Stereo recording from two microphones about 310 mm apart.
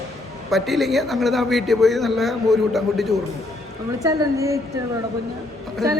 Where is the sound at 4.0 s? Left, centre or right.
Centre.